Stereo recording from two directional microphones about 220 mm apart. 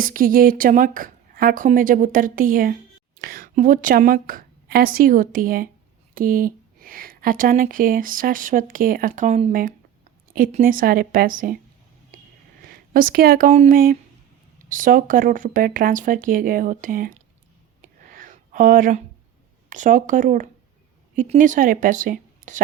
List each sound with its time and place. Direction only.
0.0 s a woman's voice: 40° right (ahead or behind)
12.6 s a woman's voice: 40° right (ahead or behind)
18.0 s a sound: 40° right (ahead or behind)
19.7 s a woman's voice: 35° right (ahead or behind)